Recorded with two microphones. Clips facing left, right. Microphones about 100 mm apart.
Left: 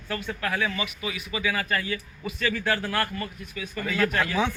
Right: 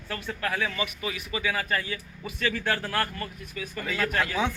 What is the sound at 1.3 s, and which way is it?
Speech, 30° right (ahead or behind).